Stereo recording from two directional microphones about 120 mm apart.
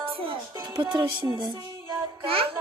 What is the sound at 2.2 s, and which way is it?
Music, 50° right (ahead or behind).